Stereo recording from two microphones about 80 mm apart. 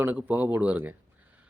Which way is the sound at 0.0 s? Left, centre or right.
Centre.